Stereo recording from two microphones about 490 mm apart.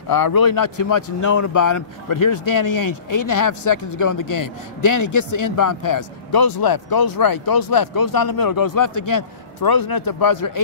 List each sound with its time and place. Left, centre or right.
0.1 s speech: left